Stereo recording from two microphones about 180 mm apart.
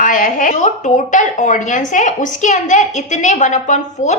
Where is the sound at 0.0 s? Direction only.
45° left (ahead or behind).